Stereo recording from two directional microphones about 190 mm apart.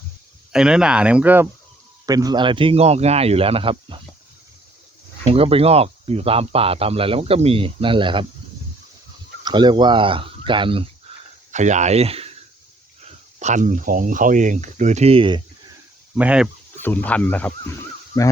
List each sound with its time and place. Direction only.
0.5 s speech: 5° right (ahead or behind)
2.0 s speech: 20° right (ahead or behind)
5.2 s speech: 30° right (ahead or behind)
9.4 s speech: 25° right (ahead or behind)
11.5 s speech: 40° right (ahead or behind)
13.4 s speech: 40° right (ahead or behind)
16.1 s speech: 5° right (ahead or behind)
16.7 s speech: 10° left (ahead or behind)
18.1 s speech: 20° left (ahead or behind)